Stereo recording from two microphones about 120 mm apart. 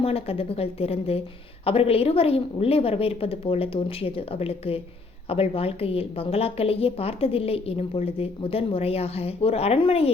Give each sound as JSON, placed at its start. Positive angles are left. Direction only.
{"t": 0.0, "sound": "a woman's voice", "side_deg": 55}